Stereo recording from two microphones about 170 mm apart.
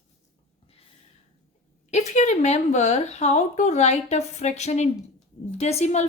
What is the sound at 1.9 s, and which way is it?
Speech, 40° left (ahead or behind).